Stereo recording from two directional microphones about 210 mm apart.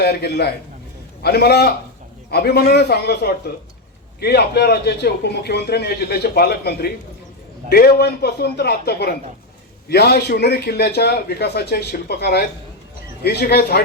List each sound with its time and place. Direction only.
0.0 s a man's voice: 50° left (ahead or behind)